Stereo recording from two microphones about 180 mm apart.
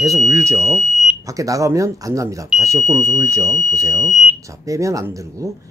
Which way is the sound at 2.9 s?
15° right (ahead or behind).